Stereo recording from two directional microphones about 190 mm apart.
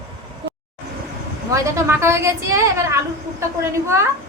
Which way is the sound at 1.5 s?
15° right (ahead or behind).